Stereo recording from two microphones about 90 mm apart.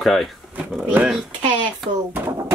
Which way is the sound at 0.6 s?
15° right (ahead or behind).